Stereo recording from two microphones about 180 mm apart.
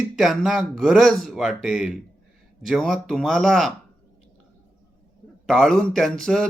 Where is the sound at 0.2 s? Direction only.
Centre (ahead or behind).